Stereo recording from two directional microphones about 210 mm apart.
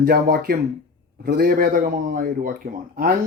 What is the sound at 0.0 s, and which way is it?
A man's voice, 45° right (ahead or behind).